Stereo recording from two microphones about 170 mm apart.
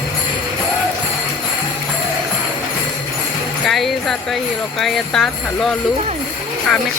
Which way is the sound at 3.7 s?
Centre (ahead or behind).